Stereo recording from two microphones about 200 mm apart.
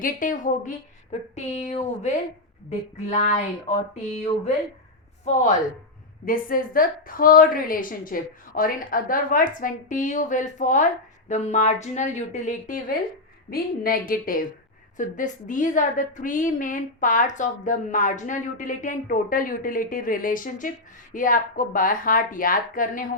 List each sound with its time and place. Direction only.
0.0 s a woman's voice: 40° left (ahead or behind)
5.2 s a woman's voice: 40° left (ahead or behind)